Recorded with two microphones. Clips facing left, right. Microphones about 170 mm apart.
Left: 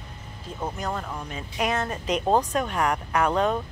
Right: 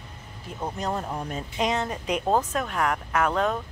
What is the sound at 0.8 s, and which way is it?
Speech, 25° right (ahead or behind).